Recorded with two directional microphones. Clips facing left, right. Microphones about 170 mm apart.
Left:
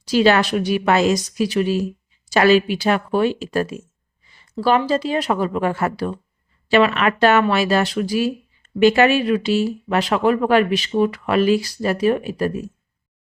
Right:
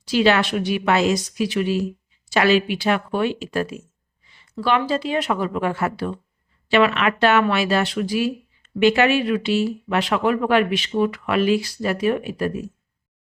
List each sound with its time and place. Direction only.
0.0 s speech: 40° left (ahead or behind)